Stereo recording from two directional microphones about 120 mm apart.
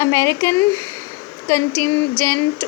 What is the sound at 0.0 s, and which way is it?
Speech, 25° left (ahead or behind).